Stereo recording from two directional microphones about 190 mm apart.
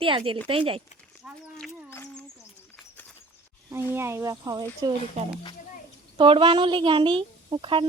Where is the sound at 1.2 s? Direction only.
5° right (ahead or behind).